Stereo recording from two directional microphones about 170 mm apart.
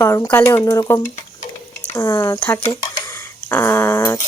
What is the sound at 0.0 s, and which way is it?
Speech, 15° left (ahead or behind).